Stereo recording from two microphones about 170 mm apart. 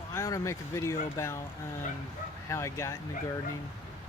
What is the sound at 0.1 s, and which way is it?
Speech, 20° left (ahead or behind).